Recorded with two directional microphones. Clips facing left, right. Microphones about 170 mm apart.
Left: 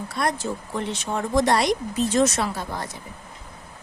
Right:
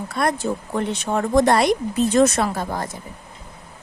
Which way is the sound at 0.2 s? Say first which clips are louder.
Right 4 dB; 55° right (ahead or behind).